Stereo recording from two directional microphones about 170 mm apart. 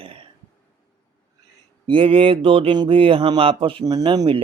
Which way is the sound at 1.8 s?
30° right (ahead or behind).